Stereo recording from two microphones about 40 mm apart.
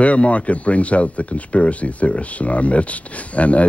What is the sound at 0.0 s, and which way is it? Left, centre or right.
Speech, left.